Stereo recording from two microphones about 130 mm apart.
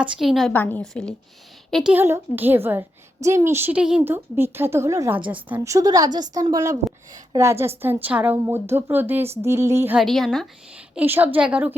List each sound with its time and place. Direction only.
0.0 s a woman's voice: 5° right (ahead or behind)
0.5 s a woman's voice: 15° left (ahead or behind)
1.7 s a woman's voice: 10° right (ahead or behind)
5.5 s a woman's voice: 25° right (ahead or behind)
10.0 s a woman's voice: centre (ahead or behind)
10.8 s a woman's voice: 15° right (ahead or behind)